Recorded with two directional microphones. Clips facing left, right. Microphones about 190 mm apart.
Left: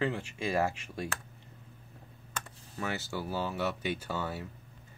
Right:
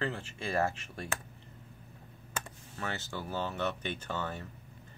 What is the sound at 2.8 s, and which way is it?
Speech, 10° left (ahead or behind).